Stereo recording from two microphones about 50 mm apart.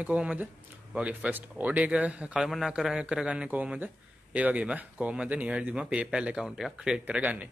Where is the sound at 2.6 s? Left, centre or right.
Centre.